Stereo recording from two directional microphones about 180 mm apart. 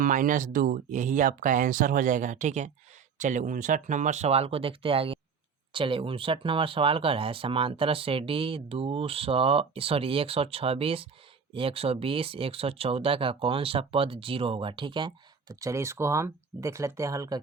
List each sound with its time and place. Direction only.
0.0 s speech: 45° right (ahead or behind); by 17.4 s 20° right (ahead or behind)